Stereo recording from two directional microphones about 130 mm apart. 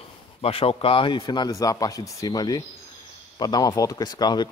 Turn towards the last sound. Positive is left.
turn(degrees=35)  # may be behind; listen again after turning